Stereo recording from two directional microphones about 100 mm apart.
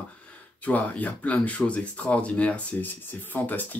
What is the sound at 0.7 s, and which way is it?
Speech, 15° left (ahead or behind).